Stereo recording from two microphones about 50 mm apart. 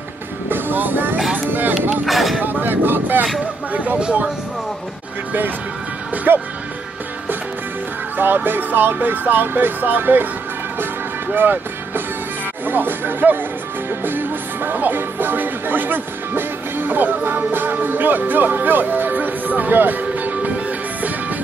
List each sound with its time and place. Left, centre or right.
0.5 s music: right
1.3 s a sound: right
2.0 s speech: centre
2.4 s music: right
3.7 s music: right
4.0 s speech: right
6.3 s music: right
8.5 s music: right
11.3 s speech: right
12.6 s music: right
17.5 s speech: right